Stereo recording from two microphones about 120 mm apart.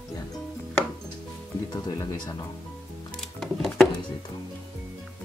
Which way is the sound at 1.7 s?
35° left (ahead or behind).